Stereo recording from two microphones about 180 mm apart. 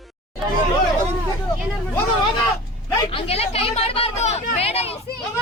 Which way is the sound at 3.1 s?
30° left (ahead or behind).